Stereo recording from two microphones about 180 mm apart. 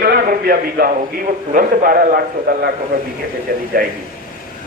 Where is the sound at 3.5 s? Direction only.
55° right (ahead or behind).